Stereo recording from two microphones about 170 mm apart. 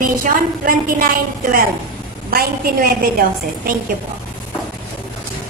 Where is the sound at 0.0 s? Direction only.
55° right (ahead or behind).